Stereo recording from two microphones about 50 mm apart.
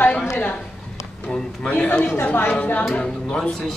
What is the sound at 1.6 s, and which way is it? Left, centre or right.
Speech, left.